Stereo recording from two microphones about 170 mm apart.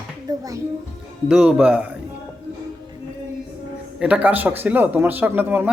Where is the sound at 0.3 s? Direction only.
20° right (ahead or behind).